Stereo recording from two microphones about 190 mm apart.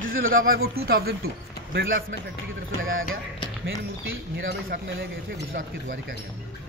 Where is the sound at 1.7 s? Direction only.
65° right (ahead or behind).